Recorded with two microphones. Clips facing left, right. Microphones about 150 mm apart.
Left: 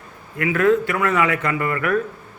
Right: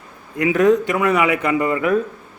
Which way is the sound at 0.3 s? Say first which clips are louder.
Right 3 dB; 20° right (ahead or behind).